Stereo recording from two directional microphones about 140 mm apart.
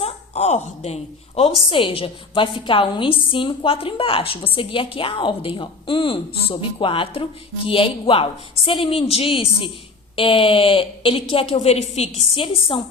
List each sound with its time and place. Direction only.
0.0 s a woman's voice: 50° left (ahead or behind)